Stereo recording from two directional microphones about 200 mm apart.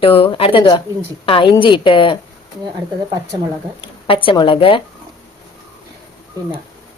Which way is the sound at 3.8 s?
25° left (ahead or behind).